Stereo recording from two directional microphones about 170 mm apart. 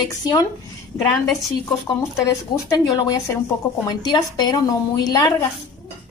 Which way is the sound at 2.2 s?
20° left (ahead or behind).